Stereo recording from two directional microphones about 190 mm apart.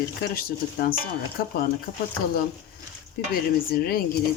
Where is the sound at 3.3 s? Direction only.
50° left (ahead or behind).